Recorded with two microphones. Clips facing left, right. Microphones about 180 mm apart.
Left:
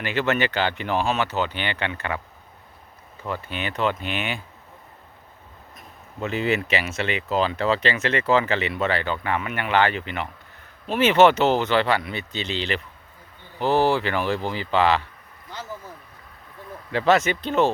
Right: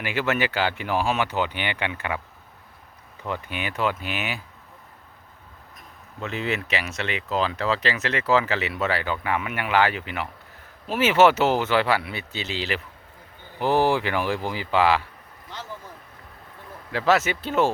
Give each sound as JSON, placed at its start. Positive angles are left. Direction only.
{"t": 0.0, "sound": "speech", "side_deg": -10}
{"t": 3.2, "sound": "speech", "side_deg": -15}
{"t": 5.7, "sound": "speech", "side_deg": 0}
{"t": 16.9, "sound": "speech", "side_deg": -5}